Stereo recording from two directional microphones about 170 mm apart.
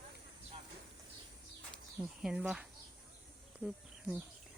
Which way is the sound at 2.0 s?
5° right (ahead or behind).